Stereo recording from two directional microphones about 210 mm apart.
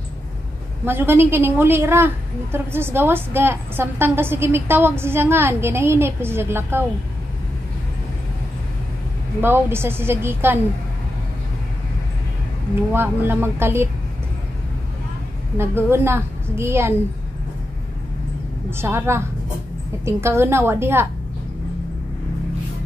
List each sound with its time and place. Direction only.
0.8 s a woman's voice: 10° right (ahead or behind)
9.4 s a woman's voice: 10° right (ahead or behind)
12.9 s a woman's voice: 10° right (ahead or behind)
15.5 s a woman's voice: 10° right (ahead or behind)
18.7 s a woman's voice: 10° right (ahead or behind)